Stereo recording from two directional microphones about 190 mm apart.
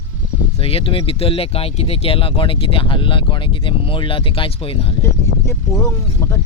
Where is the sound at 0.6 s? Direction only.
30° left (ahead or behind).